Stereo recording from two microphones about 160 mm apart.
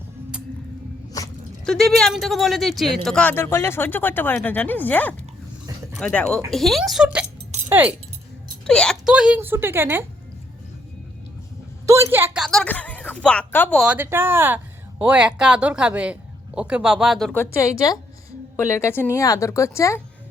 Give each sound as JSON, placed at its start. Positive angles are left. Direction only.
{"t": 1.2, "sound": "dog", "side_deg": 25}
{"t": 1.6, "sound": "speech", "side_deg": 5}
{"t": 8.6, "sound": "speech", "side_deg": 5}
{"t": 11.9, "sound": "speech", "side_deg": -15}
{"t": 12.4, "sound": "speech", "side_deg": 0}
{"t": 13.7, "sound": "speech", "side_deg": -10}
{"t": 17.3, "sound": "a woman's voice", "side_deg": 15}